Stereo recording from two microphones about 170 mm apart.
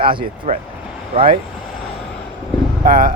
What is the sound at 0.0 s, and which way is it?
Speech, 30° right (ahead or behind).